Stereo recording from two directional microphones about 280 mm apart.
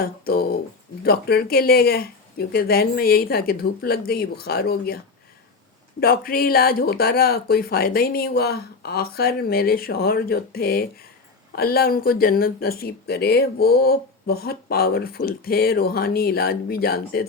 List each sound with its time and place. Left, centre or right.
0.0 s a sound: left
1.0 s speech: left
6.0 s speech: left